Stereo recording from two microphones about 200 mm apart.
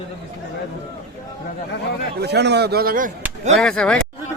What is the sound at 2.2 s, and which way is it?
Speech, 55° right (ahead or behind).